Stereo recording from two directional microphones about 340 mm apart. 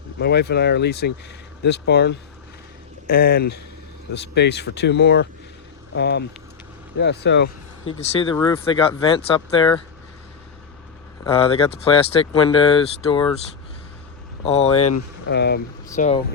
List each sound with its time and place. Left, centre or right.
0.2 s speech: left
7.9 s speech: centre
11.2 s speech: centre
14.4 s speech: centre
14.8 s speech: left
15.3 s speech: left